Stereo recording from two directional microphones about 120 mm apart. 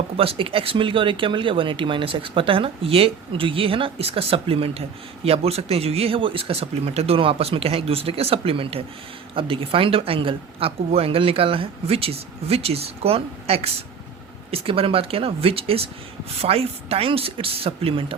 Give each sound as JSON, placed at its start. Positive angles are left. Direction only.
{"t": 0.2, "sound": "speech", "side_deg": -50}